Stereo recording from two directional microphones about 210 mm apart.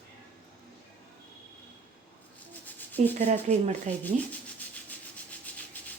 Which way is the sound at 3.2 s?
35° right (ahead or behind).